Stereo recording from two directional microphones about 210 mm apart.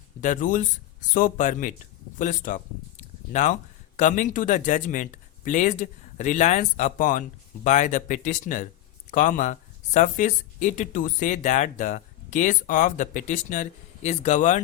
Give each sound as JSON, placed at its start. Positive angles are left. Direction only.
{"t": 0.2, "sound": "speech", "side_deg": 40}
{"t": 3.9, "sound": "speech", "side_deg": 35}